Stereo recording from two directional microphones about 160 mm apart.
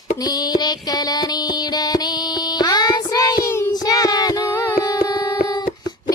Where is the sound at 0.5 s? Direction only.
25° left (ahead or behind).